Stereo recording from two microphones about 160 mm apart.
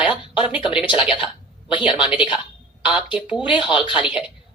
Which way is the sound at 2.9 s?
10° right (ahead or behind).